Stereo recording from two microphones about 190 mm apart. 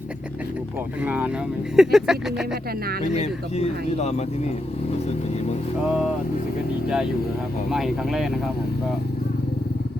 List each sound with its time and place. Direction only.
1.0 s speech: 10° right (ahead or behind)
3.1 s speech: 35° left (ahead or behind)
6.8 s speech: 5° right (ahead or behind)